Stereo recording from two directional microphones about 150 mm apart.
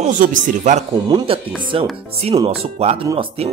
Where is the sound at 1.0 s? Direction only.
35° right (ahead or behind).